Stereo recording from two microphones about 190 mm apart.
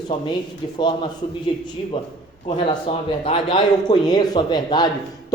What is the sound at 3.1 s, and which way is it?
A man's voice, 30° left (ahead or behind).